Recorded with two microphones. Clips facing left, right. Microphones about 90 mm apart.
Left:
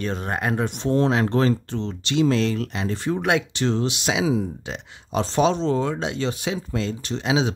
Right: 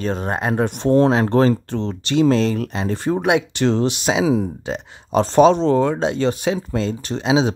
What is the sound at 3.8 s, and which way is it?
Speech, 35° right (ahead or behind).